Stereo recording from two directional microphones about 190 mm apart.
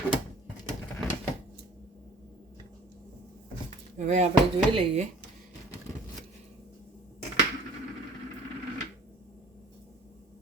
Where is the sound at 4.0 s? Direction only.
40° right (ahead or behind).